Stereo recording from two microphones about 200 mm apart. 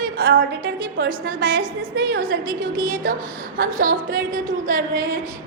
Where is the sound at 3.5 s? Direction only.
45° right (ahead or behind).